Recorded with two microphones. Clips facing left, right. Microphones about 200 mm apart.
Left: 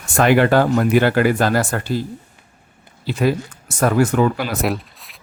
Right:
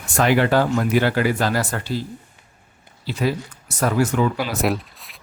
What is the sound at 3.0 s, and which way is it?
Speech, 50° left (ahead or behind).